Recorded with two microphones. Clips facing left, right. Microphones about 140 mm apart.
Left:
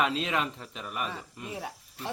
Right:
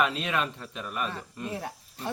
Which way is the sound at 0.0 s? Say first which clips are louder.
Right 1 dB; 20° left (ahead or behind).